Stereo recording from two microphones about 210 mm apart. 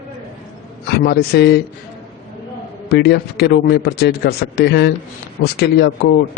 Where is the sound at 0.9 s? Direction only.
55° left (ahead or behind).